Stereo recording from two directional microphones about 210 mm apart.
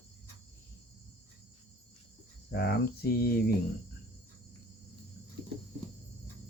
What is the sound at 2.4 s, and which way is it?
Speech, 50° left (ahead or behind).